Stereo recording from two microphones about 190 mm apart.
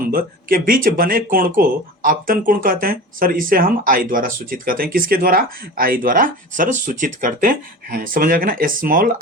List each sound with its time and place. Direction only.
0.1 s speech: 50° right (ahead or behind)